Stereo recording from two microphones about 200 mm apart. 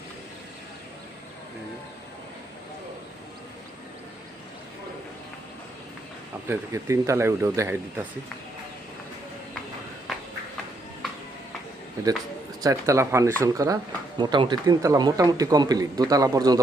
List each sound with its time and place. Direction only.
6.5 s speech: 15° right (ahead or behind)
12.6 s a man's voice: 15° right (ahead or behind)